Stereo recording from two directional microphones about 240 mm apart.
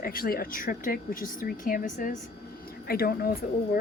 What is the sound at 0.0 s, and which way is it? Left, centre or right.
A woman's voice, left.